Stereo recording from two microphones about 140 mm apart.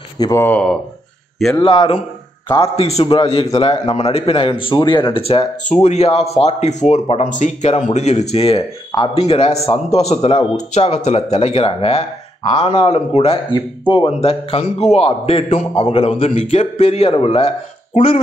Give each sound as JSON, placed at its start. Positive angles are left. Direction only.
{"t": 0.2, "sound": "speech", "side_deg": 25}
{"t": 0.5, "sound": "speech", "side_deg": 10}
{"t": 1.6, "sound": "speech", "side_deg": 35}